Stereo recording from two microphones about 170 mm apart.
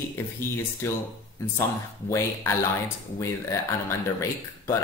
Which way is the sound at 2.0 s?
15° left (ahead or behind).